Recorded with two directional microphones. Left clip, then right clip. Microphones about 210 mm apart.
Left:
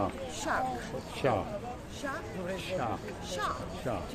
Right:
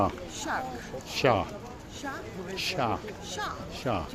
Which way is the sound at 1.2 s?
50° right (ahead or behind).